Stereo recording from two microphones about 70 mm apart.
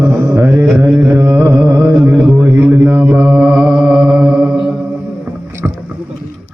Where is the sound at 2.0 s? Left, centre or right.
Right.